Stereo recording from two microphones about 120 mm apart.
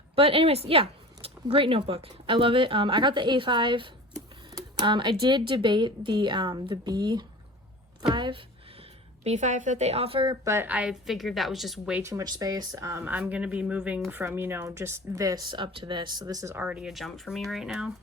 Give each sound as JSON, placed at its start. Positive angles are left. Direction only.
{"t": 0.2, "sound": "a woman's voice", "side_deg": -50}
{"t": 9.2, "sound": "a woman's voice", "side_deg": -80}
{"t": 10.2, "sound": "speech", "side_deg": -25}
{"t": 10.7, "sound": "a woman's voice", "side_deg": -10}
{"t": 12.0, "sound": "speech", "side_deg": -30}
{"t": 16.6, "sound": "a woman's voice", "side_deg": -10}